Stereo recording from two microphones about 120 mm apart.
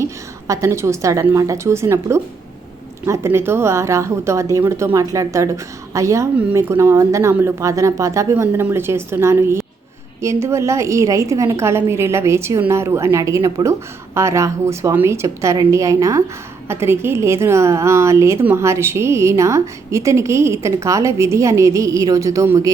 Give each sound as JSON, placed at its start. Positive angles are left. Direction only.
{"t": 0.0, "sound": "a woman's voice", "side_deg": -25}